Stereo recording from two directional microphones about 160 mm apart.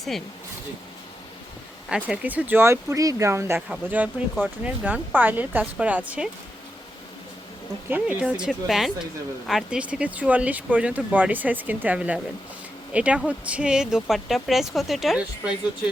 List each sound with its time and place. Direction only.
1.9 s speech: 10° right (ahead or behind)
7.9 s speech: 5° right (ahead or behind)